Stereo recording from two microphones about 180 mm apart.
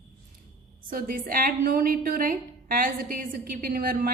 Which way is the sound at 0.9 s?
50° right (ahead or behind).